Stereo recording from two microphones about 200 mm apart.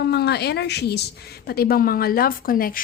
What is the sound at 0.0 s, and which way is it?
Speech, 55° left (ahead or behind).